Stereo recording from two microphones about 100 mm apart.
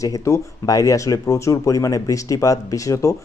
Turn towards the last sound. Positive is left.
turn(degrees=30)  # may be behind; listen again after turning